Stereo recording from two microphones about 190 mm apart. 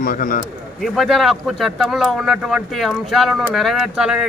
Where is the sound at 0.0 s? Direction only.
50° left (ahead or behind).